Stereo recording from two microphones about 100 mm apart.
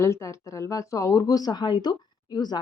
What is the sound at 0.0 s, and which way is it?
Speech, 30° left (ahead or behind).